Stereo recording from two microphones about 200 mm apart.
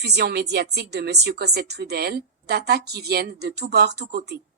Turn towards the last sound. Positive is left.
turn(degrees=-55)  # may be behind; listen again after turning